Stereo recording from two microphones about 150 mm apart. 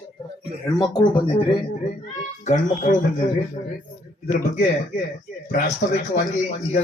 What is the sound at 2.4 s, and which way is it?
Speech, 55° left (ahead or behind).